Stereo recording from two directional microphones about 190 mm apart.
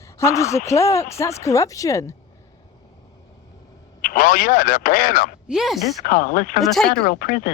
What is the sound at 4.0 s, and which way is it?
Speech, 45° left (ahead or behind).